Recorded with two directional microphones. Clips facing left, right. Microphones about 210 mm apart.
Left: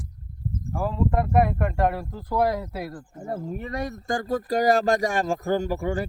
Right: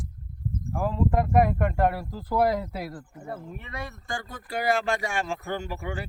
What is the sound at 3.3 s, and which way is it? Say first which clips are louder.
Speech: left 7 dB; 40° left (ahead or behind).